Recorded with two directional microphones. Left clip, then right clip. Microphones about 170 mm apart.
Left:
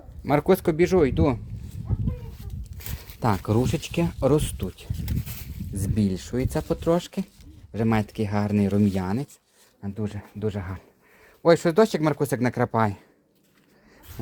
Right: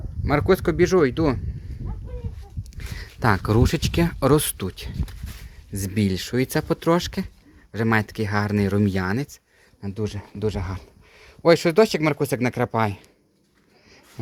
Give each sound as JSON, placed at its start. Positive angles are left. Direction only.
{"t": 0.3, "sound": "speech", "side_deg": 10}
{"t": 3.2, "sound": "speech", "side_deg": -15}
{"t": 9.8, "sound": "speech", "side_deg": -30}
{"t": 11.4, "sound": "speech", "side_deg": -10}